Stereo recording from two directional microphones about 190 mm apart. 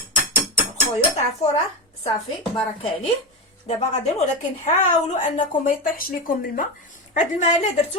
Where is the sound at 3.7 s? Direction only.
35° left (ahead or behind).